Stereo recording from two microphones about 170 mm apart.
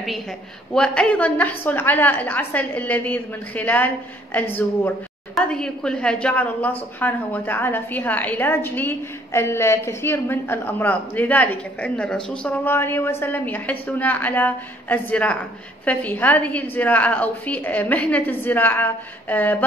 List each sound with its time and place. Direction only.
0.7 s a woman's voice: 5° left (ahead or behind)